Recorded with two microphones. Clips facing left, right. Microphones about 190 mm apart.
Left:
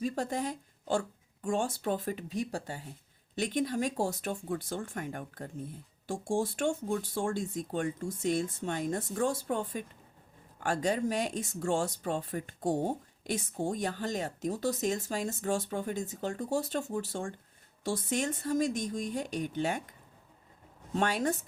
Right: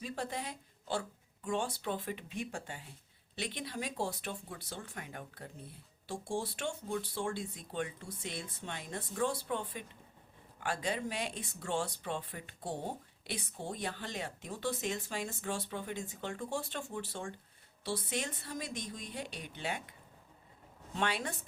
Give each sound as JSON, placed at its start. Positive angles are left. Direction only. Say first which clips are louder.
{"t": 0.0, "sound": "speech", "louder": "left 7 dB", "side_deg": 45}
{"t": 20.9, "sound": "speech", "louder": "left 6 dB", "side_deg": 45}